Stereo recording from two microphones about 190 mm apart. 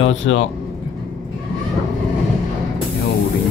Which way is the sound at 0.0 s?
85° left.